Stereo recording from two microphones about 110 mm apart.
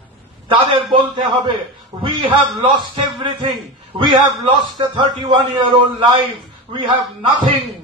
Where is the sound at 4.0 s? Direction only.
45° right (ahead or behind).